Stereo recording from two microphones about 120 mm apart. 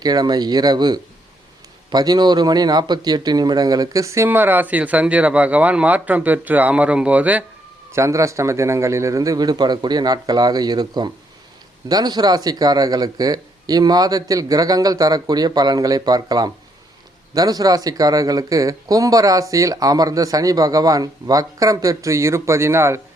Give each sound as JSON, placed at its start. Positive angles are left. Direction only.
{"t": 0.0, "sound": "speech", "side_deg": -35}
{"t": 7.9, "sound": "speech", "side_deg": -25}